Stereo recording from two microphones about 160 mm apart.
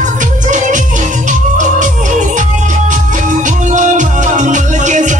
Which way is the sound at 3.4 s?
50° right (ahead or behind).